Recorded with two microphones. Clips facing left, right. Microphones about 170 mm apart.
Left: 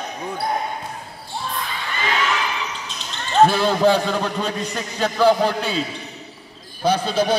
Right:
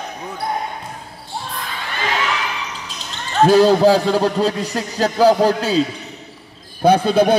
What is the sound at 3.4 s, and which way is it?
A man's voice, 40° right (ahead or behind).